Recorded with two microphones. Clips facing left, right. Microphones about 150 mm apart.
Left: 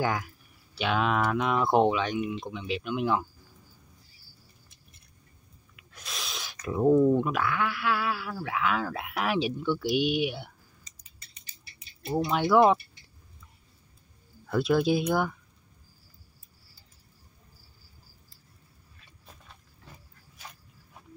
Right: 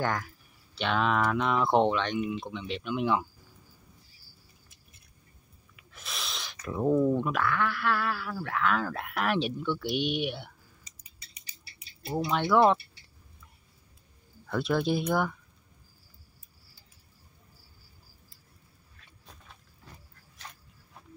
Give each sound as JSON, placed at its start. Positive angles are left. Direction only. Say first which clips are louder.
{"t": 0.0, "sound": "speech", "louder": "left 2 dB", "side_deg": 5}
{"t": 5.8, "sound": "speech", "louder": "even", "side_deg": 0}
{"t": 10.8, "sound": "cutlery", "louder": "even", "side_deg": -10}
{"t": 12.2, "sound": "speech", "louder": "left 2 dB", "side_deg": 5}
{"t": 14.5, "sound": "speech", "louder": "left 3 dB", "side_deg": 0}
{"t": 18.9, "sound": "a sound", "louder": "even", "side_deg": 0}